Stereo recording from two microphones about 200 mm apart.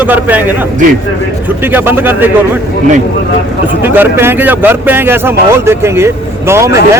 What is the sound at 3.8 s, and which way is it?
Speech, 10° right (ahead or behind).